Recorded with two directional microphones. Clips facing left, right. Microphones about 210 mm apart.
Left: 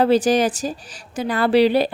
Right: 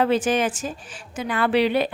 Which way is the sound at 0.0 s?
35° left (ahead or behind).